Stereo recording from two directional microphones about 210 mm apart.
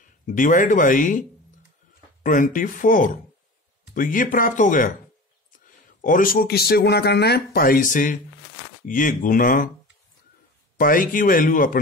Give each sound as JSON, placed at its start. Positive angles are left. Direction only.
{"t": 0.0, "sound": "speech", "side_deg": 40}
{"t": 2.2, "sound": "speech", "side_deg": 40}
{"t": 5.9, "sound": "speech", "side_deg": 40}
{"t": 10.8, "sound": "speech", "side_deg": 40}